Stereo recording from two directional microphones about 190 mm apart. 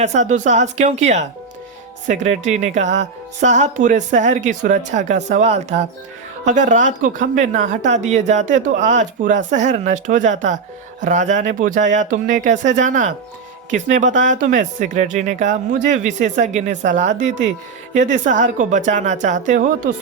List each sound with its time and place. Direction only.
0.0 s speech: 40° right (ahead or behind)